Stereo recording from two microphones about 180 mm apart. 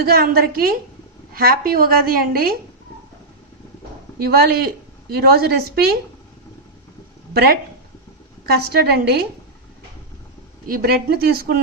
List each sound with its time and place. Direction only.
0.0 s a woman's voice: 60° right (ahead or behind)
4.2 s a woman's voice: 60° right (ahead or behind)
7.3 s a woman's voice: 60° right (ahead or behind)
10.7 s a woman's voice: 55° right (ahead or behind)